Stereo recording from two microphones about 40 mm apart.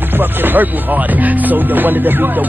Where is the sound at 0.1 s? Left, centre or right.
Right.